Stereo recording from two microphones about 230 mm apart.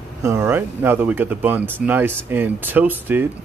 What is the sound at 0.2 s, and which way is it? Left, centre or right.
A man's voice, centre.